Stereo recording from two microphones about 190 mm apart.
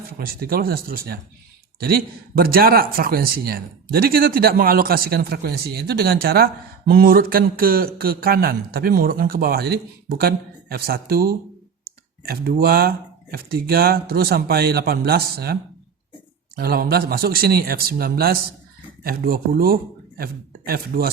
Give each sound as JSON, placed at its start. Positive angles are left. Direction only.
{"t": 0.3, "sound": "a man's voice", "side_deg": -50}
{"t": 16.6, "sound": "speech", "side_deg": -50}